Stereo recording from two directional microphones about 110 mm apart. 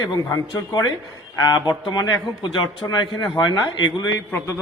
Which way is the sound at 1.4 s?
40° left (ahead or behind).